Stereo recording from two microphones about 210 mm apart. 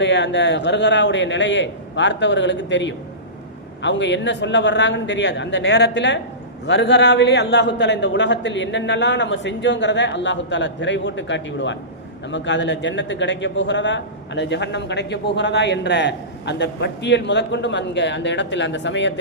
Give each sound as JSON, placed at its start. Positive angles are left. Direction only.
{"t": 0.0, "sound": "a man's voice", "side_deg": 60}